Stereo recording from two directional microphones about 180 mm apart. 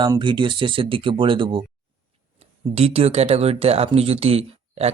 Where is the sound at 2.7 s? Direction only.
35° right (ahead or behind).